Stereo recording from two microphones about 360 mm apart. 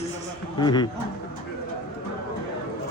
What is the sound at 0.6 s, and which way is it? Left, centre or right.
Speech, centre.